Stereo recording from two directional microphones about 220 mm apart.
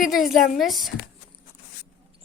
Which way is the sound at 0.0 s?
Centre (ahead or behind).